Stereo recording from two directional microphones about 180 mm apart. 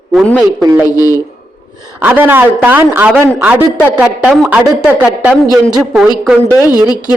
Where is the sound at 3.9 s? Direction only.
5° right (ahead or behind).